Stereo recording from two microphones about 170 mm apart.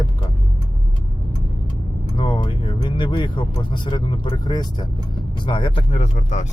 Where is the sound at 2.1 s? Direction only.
30° left (ahead or behind).